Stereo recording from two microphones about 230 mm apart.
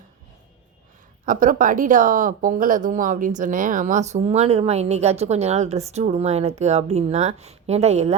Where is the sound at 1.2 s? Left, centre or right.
Right.